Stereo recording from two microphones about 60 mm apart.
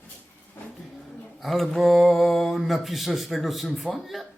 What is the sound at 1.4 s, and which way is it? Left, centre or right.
Speech, centre.